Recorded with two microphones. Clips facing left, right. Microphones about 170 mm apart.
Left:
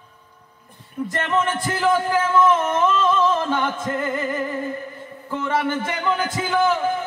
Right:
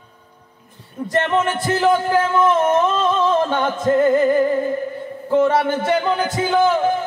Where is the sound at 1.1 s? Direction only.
30° right (ahead or behind).